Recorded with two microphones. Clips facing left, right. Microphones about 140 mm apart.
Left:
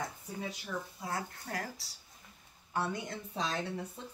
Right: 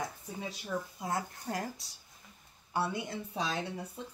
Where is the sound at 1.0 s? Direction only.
25° right (ahead or behind).